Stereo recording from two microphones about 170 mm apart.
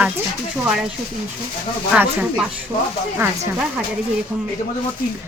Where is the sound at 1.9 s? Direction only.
5° right (ahead or behind).